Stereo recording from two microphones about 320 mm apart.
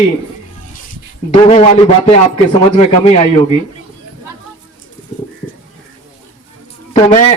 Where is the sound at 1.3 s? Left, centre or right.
Centre.